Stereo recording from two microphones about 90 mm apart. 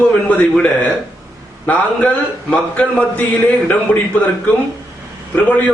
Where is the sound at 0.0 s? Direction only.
15° left (ahead or behind).